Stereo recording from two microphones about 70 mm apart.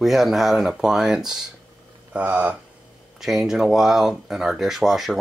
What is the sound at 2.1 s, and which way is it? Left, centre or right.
Speech, centre.